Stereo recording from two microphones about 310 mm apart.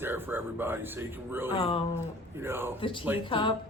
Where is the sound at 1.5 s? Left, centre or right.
Centre.